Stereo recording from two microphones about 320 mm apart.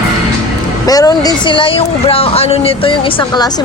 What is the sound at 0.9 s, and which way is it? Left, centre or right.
Speech, centre.